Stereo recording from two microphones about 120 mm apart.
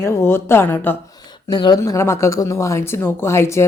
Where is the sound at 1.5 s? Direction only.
35° left (ahead or behind).